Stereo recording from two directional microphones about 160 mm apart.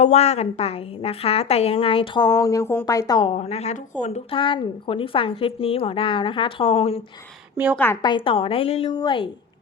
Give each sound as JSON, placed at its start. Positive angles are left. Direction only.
{"t": 0.0, "sound": "a woman's voice", "side_deg": 45}
{"t": 3.3, "sound": "a woman's voice", "side_deg": 40}
{"t": 7.5, "sound": "a woman's voice", "side_deg": -10}
{"t": 8.0, "sound": "a woman's voice", "side_deg": 30}
{"t": 8.9, "sound": "speech", "side_deg": 25}